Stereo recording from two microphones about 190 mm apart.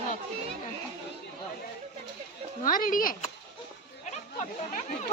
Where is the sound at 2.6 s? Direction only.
45° left (ahead or behind).